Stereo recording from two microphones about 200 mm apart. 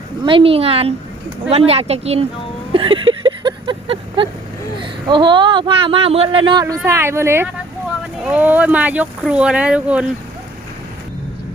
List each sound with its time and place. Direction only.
0.3 s a woman's voice: 25° right (ahead or behind)
2.7 s a sound: 25° right (ahead or behind)
4.8 s speech: 25° right (ahead or behind); by 10.1 s 5° right (ahead or behind)